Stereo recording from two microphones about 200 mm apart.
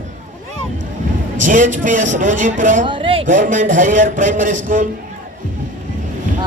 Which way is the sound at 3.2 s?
40° right (ahead or behind).